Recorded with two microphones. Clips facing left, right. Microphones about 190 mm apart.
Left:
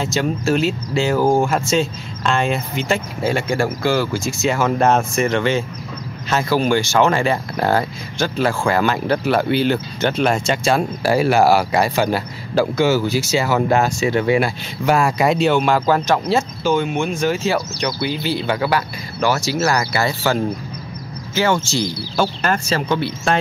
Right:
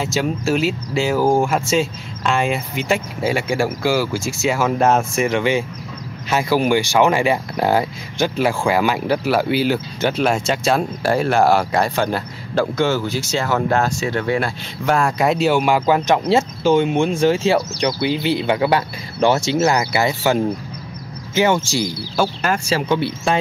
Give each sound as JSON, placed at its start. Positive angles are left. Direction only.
{"t": 0.0, "sound": "speech", "side_deg": -5}